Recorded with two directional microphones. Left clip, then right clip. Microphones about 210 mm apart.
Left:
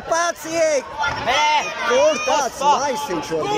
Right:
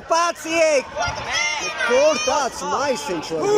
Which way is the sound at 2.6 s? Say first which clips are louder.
Left 8 dB; 45° left (ahead or behind).